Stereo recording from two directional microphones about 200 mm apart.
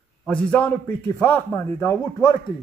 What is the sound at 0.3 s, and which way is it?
A man's voice, 5° left (ahead or behind).